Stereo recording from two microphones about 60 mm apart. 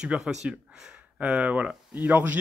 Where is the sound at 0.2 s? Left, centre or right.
Centre.